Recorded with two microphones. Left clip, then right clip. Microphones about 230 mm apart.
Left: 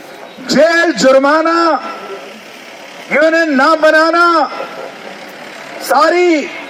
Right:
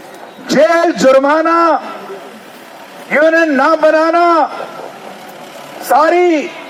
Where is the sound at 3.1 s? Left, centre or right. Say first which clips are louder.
Right 1 dB; left.